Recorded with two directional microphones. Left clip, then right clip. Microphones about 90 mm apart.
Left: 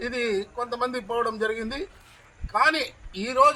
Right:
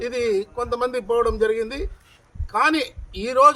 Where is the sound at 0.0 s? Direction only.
25° right (ahead or behind).